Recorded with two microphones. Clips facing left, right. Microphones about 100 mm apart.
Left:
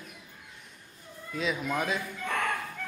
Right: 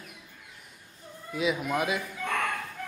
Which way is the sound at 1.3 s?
5° right (ahead or behind).